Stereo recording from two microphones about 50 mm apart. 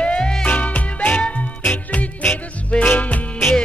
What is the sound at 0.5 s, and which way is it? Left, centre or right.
Music, left.